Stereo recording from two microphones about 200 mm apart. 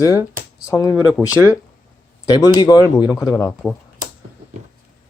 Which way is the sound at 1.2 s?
Centre (ahead or behind).